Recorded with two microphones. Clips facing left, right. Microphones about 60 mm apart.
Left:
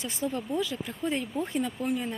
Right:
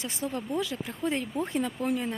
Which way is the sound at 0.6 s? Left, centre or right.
Right.